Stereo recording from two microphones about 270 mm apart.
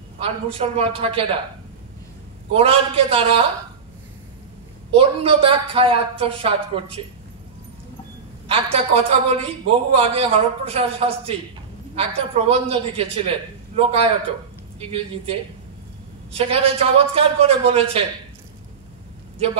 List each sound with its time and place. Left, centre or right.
0.2 s a man's voice: centre
2.5 s a man's voice: right
4.9 s a man's voice: centre
8.5 s a man's voice: right
16.3 s a man's voice: right